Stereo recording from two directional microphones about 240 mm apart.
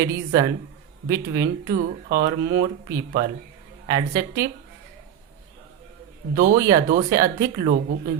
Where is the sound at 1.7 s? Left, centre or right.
Right.